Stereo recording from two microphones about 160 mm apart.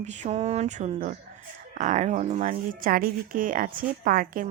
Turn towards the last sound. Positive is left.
turn(degrees=-60)  # may be behind; listen again after turning